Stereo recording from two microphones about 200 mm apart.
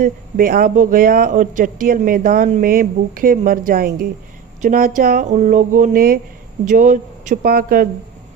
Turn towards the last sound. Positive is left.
turn(degrees=-45)  # may be behind; listen again after turning